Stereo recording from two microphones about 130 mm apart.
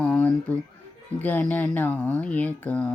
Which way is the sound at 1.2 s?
15° left (ahead or behind).